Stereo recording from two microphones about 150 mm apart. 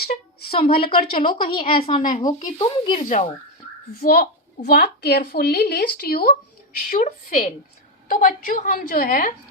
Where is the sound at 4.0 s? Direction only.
90° left.